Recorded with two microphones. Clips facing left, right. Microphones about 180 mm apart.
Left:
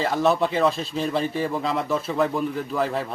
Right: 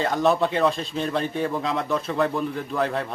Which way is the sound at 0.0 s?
Centre (ahead or behind).